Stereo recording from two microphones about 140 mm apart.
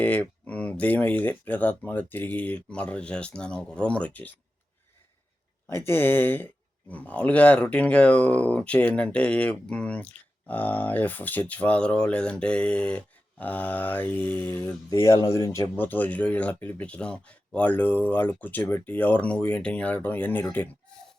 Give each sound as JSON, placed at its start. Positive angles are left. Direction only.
{"t": 0.0, "sound": "speech", "side_deg": 10}
{"t": 5.6, "sound": "speech", "side_deg": 15}